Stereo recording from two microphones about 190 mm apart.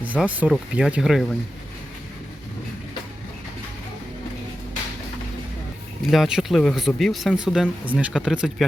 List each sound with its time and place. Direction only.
0.0 s speech: 10° right (ahead or behind)
6.1 s speech: centre (ahead or behind)